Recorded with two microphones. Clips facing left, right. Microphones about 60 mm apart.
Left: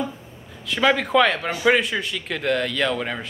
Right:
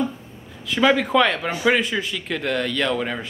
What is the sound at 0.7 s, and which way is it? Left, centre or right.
Speech, centre.